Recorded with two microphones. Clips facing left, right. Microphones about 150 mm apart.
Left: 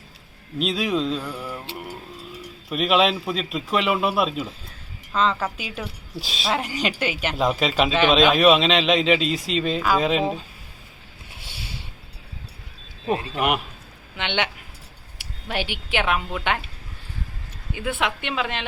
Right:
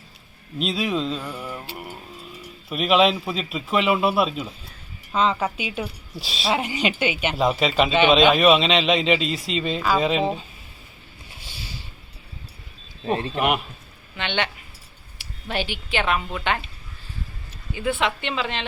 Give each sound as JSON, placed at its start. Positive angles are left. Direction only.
{"t": 0.6, "sound": "a man's voice", "side_deg": 0}
{"t": 1.2, "sound": "music", "side_deg": -10}
{"t": 1.7, "sound": "a man's voice", "side_deg": 0}
{"t": 11.3, "sound": "a sound", "side_deg": 60}
{"t": 14.2, "sound": "a woman's voice", "side_deg": 15}
{"t": 17.7, "sound": "a woman's voice", "side_deg": 10}